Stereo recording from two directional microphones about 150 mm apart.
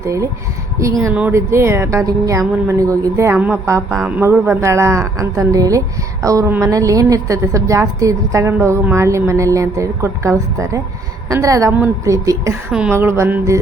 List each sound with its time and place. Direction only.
0.0 s a woman's voice: 20° right (ahead or behind)
3.3 s music: 10° right (ahead or behind)
4.2 s a woman's voice: 15° right (ahead or behind)
12.7 s music: 10° right (ahead or behind)